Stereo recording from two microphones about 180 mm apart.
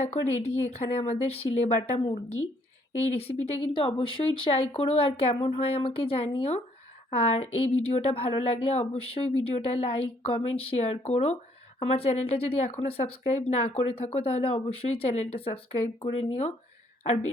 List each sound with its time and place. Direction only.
0.0 s speech: 35° left (ahead or behind)